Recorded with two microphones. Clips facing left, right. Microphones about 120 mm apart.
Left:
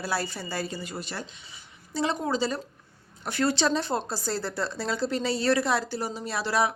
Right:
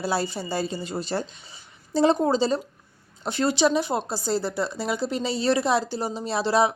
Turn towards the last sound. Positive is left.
turn(degrees=-20)  # may be behind; listen again after turning